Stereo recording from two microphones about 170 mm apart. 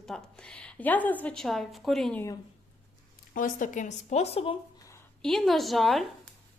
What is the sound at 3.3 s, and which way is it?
Speech, 50° left (ahead or behind).